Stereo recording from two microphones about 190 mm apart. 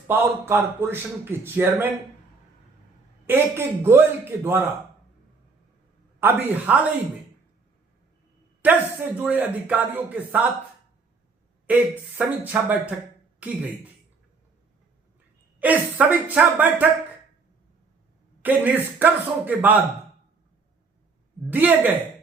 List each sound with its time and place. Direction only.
0.1 s a man's voice: 10° right (ahead or behind)
3.2 s a man's voice: 10° right (ahead or behind)
6.1 s a man's voice: 10° right (ahead or behind)
8.6 s a sound: 10° right (ahead or behind)
9.1 s a man's voice: 5° right (ahead or behind)
11.6 s a man's voice: 10° right (ahead or behind)
15.6 s a man's voice: 10° right (ahead or behind)
18.4 s a man's voice: 10° right (ahead or behind)
21.5 s a man's voice: 10° right (ahead or behind)